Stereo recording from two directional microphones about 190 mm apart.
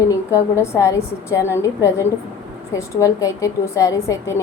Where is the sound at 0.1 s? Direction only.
15° left (ahead or behind).